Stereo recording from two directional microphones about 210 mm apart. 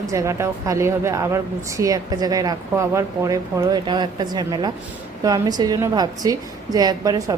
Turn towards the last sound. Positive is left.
turn(degrees=-15)  # may be behind; listen again after turning